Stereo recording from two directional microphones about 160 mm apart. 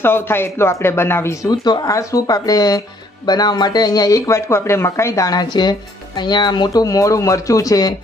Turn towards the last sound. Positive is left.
turn(degrees=25)  # may be behind; listen again after turning